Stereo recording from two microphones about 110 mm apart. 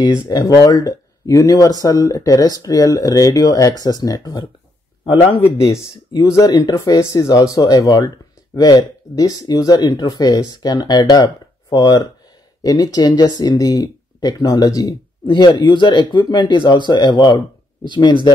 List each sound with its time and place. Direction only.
0.0 s speech: 35° left (ahead or behind)
5.0 s speech: 55° left (ahead or behind)
5.7 s speech: 25° left (ahead or behind)
15.2 s speech: 45° left (ahead or behind)